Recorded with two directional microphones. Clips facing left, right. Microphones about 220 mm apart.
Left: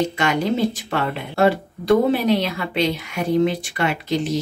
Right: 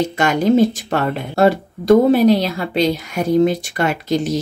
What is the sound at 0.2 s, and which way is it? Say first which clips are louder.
A woman's voice: right 9 dB; 45° right (ahead or behind).